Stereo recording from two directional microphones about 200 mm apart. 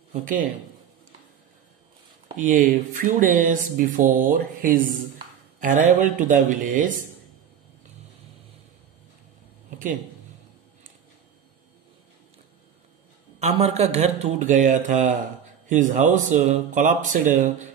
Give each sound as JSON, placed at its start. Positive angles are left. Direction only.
{"t": 0.1, "sound": "a man's voice", "side_deg": -40}
{"t": 2.4, "sound": "speech", "side_deg": -40}
{"t": 13.4, "sound": "speech", "side_deg": -35}